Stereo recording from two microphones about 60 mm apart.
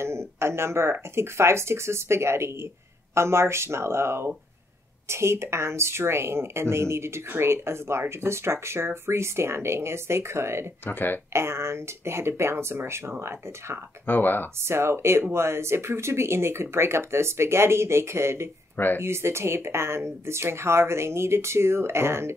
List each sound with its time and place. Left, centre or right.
0.0 s a sound: right
1.1 s speech: right
10.9 s speech: left
11.3 s speech: right
14.0 s speech: left
14.7 s speech: right